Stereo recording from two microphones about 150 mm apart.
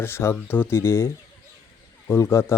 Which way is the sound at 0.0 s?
15° left (ahead or behind).